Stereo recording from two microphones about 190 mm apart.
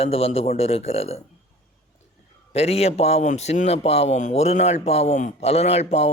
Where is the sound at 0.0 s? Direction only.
30° left (ahead or behind).